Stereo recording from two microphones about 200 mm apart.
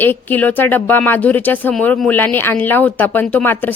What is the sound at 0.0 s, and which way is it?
Speech, 10° left (ahead or behind).